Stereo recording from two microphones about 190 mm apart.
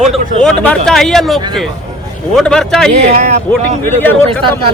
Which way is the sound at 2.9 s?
35° right (ahead or behind).